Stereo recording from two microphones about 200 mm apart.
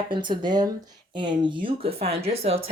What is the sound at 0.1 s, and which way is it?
Speech, 25° right (ahead or behind).